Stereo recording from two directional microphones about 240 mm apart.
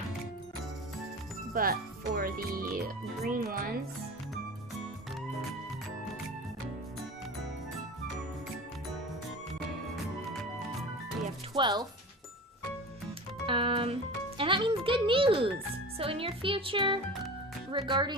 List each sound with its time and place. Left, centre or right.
1.5 s speech: right
11.5 s speech: centre
13.4 s music: right
14.3 s speech: right